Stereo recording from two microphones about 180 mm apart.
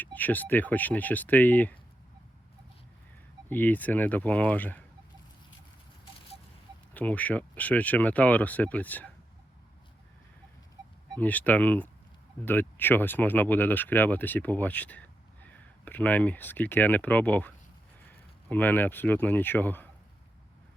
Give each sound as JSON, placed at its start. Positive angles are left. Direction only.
{"t": 0.0, "sound": "speech", "side_deg": 10}
{"t": 3.5, "sound": "speech", "side_deg": 10}
{"t": 6.9, "sound": "speech", "side_deg": 10}
{"t": 11.1, "sound": "speech", "side_deg": 10}